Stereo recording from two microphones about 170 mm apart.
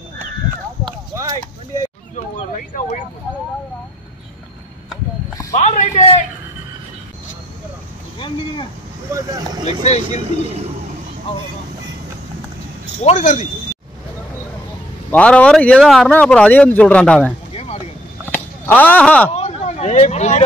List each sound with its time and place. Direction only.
2.1 s a sound: 45° left (ahead or behind)
5.5 s a man's voice: 45° left (ahead or behind)
9.1 s speech: 25° right (ahead or behind)
13.0 s speech: 45° left (ahead or behind)
15.0 s speech: 10° left (ahead or behind)
18.2 s a sound: 10° left (ahead or behind)
19.3 s speech: 40° left (ahead or behind)